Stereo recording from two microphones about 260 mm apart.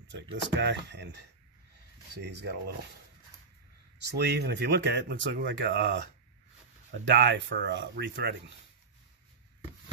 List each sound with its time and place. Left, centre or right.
0.3 s speech: right
4.2 s speech: right